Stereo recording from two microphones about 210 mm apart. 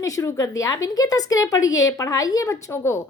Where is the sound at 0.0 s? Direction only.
15° left (ahead or behind).